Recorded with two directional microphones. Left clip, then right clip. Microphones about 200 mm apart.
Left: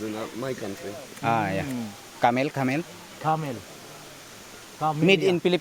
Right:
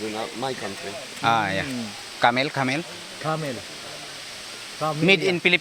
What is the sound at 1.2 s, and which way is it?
A man's voice, 15° left (ahead or behind).